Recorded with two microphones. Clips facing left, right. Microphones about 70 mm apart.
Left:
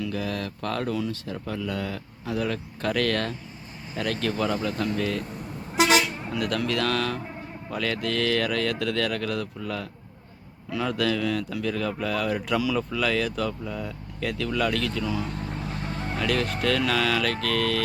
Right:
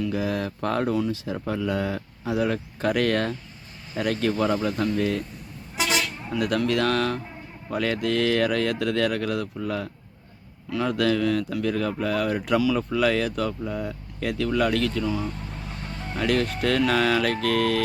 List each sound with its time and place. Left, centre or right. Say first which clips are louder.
0.1 s speech: right 4 dB; centre
0.9 s speech: right 4 dB; centre
1.5 s speech: right 4 dB; right; by 5.2 s centre
6.3 s speech: right 4 dB; centre
15.0 s speech: right 2 dB; centre
16.1 s speech: right 3 dB; centre